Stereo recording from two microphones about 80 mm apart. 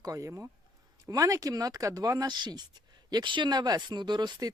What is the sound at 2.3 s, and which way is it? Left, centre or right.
Speech, right.